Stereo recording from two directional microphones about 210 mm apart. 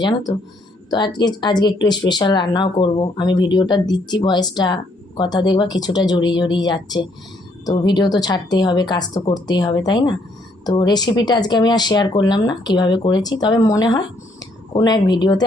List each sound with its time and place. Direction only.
0.0 s speech: 20° left (ahead or behind)